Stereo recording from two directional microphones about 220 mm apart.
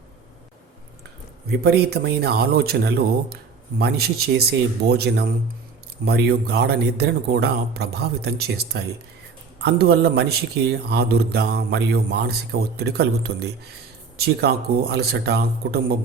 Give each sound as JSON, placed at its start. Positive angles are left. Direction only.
{"t": 1.5, "sound": "a man's voice", "side_deg": -45}